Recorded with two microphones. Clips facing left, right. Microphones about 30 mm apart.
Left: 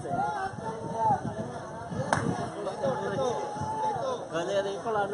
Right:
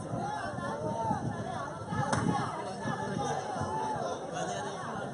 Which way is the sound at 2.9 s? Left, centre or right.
Centre.